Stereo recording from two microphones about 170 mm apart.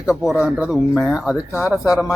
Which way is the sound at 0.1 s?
5° right (ahead or behind).